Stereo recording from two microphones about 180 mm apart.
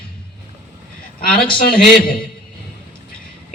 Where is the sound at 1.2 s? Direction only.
55° left (ahead or behind).